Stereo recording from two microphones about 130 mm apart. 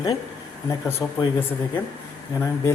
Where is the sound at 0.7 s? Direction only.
20° left (ahead or behind).